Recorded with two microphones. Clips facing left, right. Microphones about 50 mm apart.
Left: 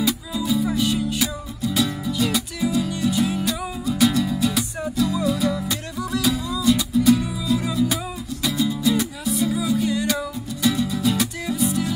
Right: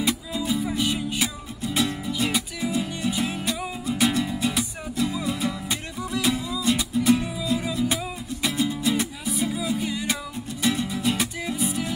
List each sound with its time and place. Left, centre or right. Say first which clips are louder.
0.0 s music: left 2 dB; right
10.6 s music: left 4 dB; right